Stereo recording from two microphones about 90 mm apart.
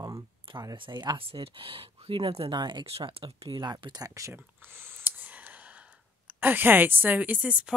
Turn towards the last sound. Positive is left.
turn(degrees=-15)  # may be behind; listen again after turning